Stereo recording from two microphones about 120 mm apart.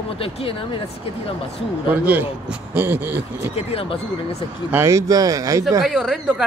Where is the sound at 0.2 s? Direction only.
50° left (ahead or behind).